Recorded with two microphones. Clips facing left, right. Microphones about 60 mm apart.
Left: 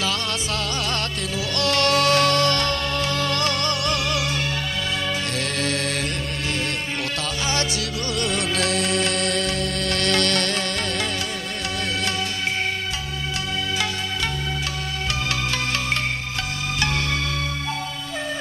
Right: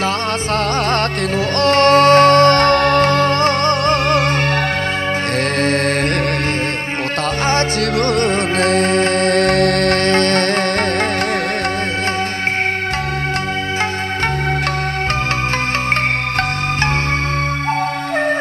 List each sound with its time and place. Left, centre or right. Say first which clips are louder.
1.6 s music: right 9 dB; right
5.6 s music: right 9 dB; right
7.4 s music: right 9 dB; right